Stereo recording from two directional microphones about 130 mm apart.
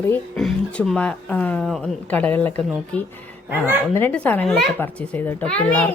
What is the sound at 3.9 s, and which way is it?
A child's voice, 15° left (ahead or behind).